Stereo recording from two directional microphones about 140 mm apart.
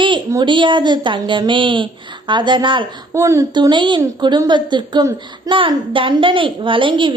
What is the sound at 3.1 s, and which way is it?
Speech, 20° right (ahead or behind).